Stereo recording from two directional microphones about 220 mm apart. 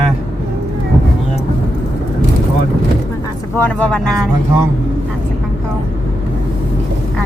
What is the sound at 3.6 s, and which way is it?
Speech, 5° left (ahead or behind).